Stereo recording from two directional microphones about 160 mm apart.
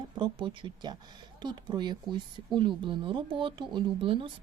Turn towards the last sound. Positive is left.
turn(degrees=-35)  # may be behind; listen again after turning